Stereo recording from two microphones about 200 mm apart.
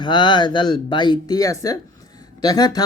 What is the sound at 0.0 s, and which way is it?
Speech, 20° left (ahead or behind).